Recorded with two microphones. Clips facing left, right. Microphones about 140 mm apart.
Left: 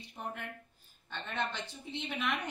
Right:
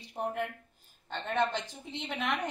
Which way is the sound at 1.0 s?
60° right (ahead or behind).